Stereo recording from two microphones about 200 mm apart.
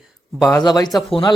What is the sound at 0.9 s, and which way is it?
Speech, centre (ahead or behind).